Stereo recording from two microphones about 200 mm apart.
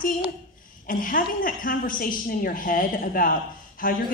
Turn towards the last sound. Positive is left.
turn(degrees=40)  # may be behind; listen again after turning